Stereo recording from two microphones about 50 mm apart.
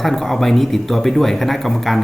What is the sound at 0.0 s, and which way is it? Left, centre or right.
Speech, centre.